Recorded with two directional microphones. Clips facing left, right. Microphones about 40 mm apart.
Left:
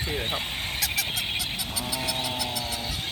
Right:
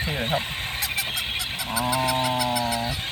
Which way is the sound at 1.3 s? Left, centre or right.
Right.